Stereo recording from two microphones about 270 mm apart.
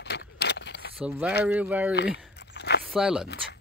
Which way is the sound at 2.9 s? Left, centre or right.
Centre.